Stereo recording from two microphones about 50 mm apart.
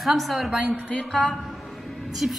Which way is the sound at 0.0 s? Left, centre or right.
Centre.